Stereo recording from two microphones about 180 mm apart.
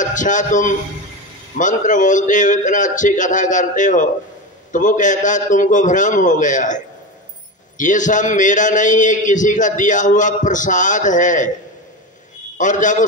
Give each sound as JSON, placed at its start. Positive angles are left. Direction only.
{"t": 0.0, "sound": "a man's voice", "side_deg": 45}
{"t": 12.5, "sound": "a man's voice", "side_deg": 45}